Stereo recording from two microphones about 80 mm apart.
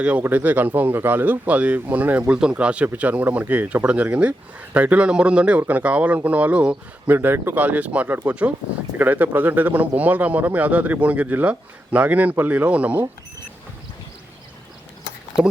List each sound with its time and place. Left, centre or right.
0.0 s speech: centre